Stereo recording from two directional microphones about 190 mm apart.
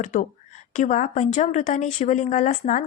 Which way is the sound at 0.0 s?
40° left (ahead or behind).